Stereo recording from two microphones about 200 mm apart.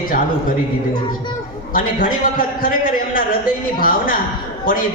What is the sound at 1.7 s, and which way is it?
A man's voice, 45° left (ahead or behind).